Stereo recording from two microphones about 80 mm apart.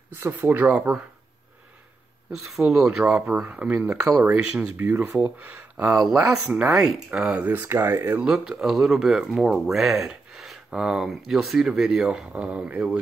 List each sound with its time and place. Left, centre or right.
0.3 s speech: right
2.3 s speech: centre
3.4 s speech: centre
5.9 s speech: centre; by 8.1 s right
8.2 s speech: centre